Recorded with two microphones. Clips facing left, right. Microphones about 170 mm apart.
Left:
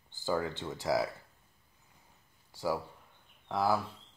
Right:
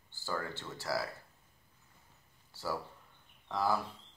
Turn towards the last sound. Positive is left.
turn(degrees=10)  # may be behind; listen again after turning